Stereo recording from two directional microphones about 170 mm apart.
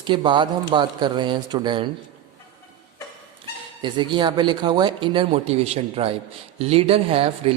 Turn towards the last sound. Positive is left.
turn(degrees=-35)  # may be behind; listen again after turning